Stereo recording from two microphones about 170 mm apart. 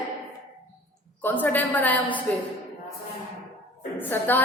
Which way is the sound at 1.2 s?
10° left (ahead or behind).